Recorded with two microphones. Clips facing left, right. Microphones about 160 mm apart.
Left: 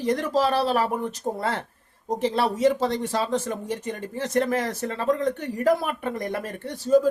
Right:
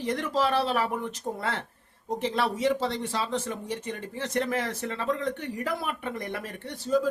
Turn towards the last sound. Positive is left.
turn(degrees=45)  # may be behind; listen again after turning